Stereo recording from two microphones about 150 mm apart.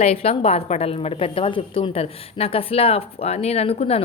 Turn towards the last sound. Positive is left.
turn(degrees=45)  # may be behind; listen again after turning